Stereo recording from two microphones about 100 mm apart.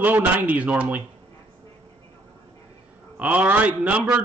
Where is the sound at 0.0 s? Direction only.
15° right (ahead or behind).